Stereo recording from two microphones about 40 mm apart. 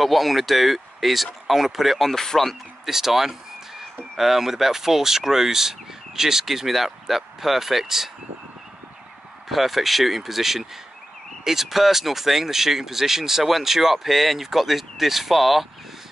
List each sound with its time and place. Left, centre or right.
0.0 s speech: centre
2.8 s speech: centre
9.5 s speech: centre